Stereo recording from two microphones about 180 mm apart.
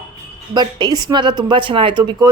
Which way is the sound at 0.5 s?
25° right (ahead or behind).